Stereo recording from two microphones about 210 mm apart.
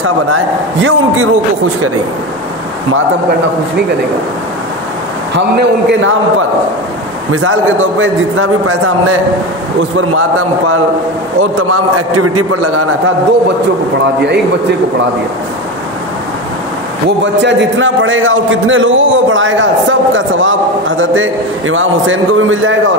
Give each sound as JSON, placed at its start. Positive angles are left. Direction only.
{"t": 0.0, "sound": "a man's voice", "side_deg": -75}
{"t": 5.3, "sound": "a man's voice", "side_deg": -55}
{"t": 7.3, "sound": "a man's voice", "side_deg": -75}
{"t": 12.2, "sound": "a man's voice", "side_deg": -90}
{"t": 17.2, "sound": "a man's voice", "side_deg": -60}